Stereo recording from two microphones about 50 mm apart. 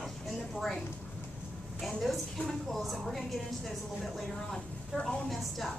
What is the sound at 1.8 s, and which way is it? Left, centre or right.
A woman's voice, centre.